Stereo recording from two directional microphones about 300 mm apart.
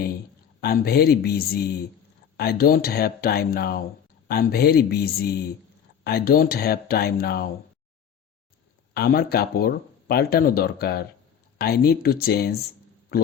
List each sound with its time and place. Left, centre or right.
0.6 s speech: left
8.9 s a man's voice: left